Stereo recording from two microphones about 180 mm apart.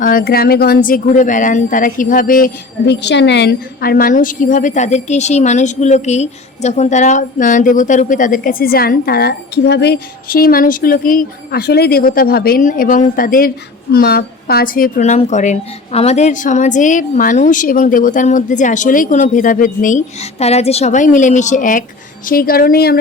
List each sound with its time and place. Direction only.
0.0 s speech: 50° left (ahead or behind)